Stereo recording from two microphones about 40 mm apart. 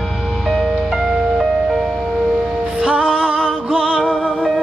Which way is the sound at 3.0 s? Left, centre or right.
Right.